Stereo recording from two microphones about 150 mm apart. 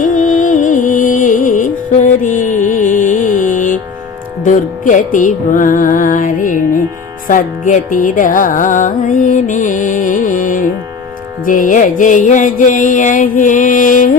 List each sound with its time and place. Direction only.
0.0 s music: 60° left (ahead or behind)